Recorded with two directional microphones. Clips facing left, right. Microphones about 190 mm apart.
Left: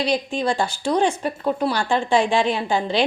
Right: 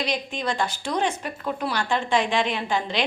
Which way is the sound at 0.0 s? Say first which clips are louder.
Left 6 dB; 30° left (ahead or behind).